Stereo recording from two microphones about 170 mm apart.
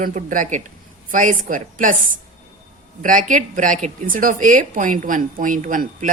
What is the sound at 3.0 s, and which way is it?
Speech, 50° right (ahead or behind).